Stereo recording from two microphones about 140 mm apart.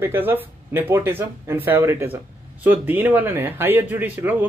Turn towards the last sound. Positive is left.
turn(degrees=-15)  # may be behind; listen again after turning